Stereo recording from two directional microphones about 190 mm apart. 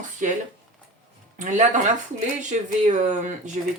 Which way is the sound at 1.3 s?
40° right (ahead or behind).